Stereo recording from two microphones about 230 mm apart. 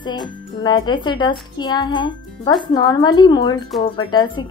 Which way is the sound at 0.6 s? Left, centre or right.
Centre.